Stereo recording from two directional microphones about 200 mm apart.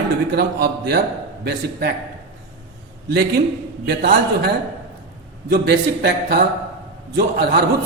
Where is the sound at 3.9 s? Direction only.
50° right (ahead or behind).